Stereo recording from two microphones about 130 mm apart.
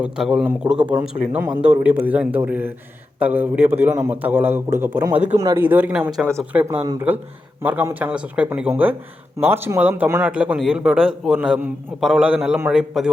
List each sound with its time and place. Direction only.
0.0 s a man's voice: 5° right (ahead or behind); by 5.6 s 25° right (ahead or behind)
5.6 s a man's voice: 15° right (ahead or behind)
10.2 s a man's voice: 10° right (ahead or behind)